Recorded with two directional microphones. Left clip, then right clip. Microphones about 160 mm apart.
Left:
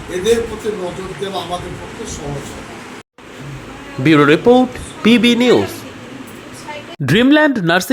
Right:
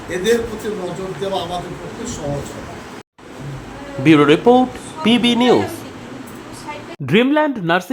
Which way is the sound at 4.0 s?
15° left (ahead or behind).